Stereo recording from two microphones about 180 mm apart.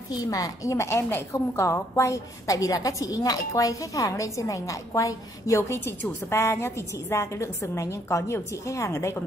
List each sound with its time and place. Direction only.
0.3 s a woman's voice: 20° left (ahead or behind)